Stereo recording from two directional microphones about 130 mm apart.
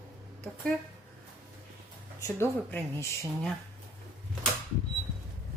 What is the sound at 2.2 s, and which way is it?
Speech, 20° left (ahead or behind).